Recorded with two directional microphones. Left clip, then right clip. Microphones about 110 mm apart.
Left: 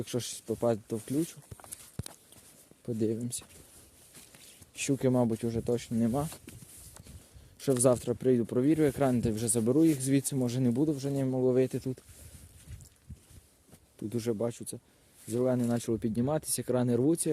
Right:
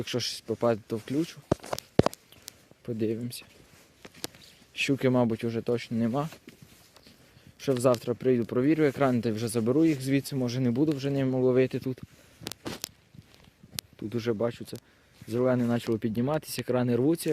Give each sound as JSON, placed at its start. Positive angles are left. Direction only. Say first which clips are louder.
{"t": 0.0, "sound": "speech", "louder": "right 5 dB", "side_deg": 30}
{"t": 0.6, "sound": "speech", "louder": "right 3 dB", "side_deg": 20}
{"t": 2.8, "sound": "speech", "louder": "right 1 dB", "side_deg": 40}
{"t": 4.7, "sound": "speech", "louder": "right 3 dB", "side_deg": 25}
{"t": 7.6, "sound": "speech", "louder": "right 1 dB", "side_deg": 55}
{"t": 8.0, "sound": "speech", "louder": "right 2 dB", "side_deg": 40}
{"t": 8.5, "sound": "speech", "louder": "right 2 dB", "side_deg": 25}
{"t": 9.8, "sound": "speech", "louder": "right 1 dB", "side_deg": 50}
{"t": 10.8, "sound": "speech", "louder": "right 3 dB", "side_deg": 0}
{"t": 11.5, "sound": "speech", "louder": "right 3 dB", "side_deg": 15}
{"t": 14.1, "sound": "speech", "louder": "right 3 dB", "side_deg": 35}
{"t": 14.3, "sound": "speech", "louder": "right 4 dB", "side_deg": 10}
{"t": 15.5, "sound": "speech", "louder": "right 3 dB", "side_deg": 10}